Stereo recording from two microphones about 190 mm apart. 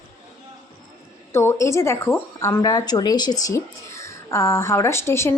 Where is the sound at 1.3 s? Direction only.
15° left (ahead or behind).